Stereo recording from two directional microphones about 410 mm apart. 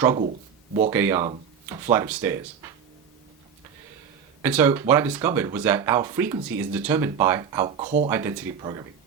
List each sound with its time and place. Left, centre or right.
0.0 s speech: centre
4.4 s speech: centre
8.1 s speech: centre